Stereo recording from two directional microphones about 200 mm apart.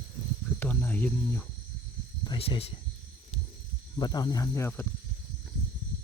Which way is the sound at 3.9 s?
20° left (ahead or behind).